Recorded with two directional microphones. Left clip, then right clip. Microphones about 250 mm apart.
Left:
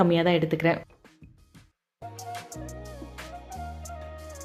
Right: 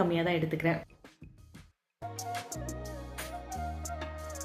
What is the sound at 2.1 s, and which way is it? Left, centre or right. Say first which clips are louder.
Music: even; centre.